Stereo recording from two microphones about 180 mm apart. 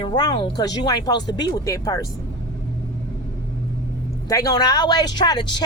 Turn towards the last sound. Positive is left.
turn(degrees=25)  # may be behind; listen again after turning